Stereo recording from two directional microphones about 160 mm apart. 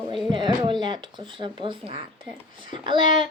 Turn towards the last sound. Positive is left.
turn(degrees=-30)  # may be behind; listen again after turning